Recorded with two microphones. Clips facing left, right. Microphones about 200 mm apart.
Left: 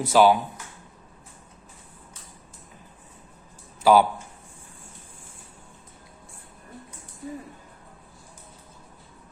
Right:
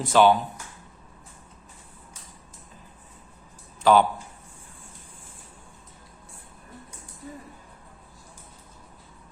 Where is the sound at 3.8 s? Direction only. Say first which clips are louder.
Left 1 dB; 10° left (ahead or behind).